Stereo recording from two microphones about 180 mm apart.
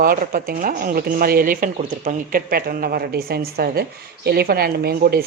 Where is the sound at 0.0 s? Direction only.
50° right (ahead or behind).